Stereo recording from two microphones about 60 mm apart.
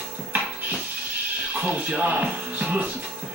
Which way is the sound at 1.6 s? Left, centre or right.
Right.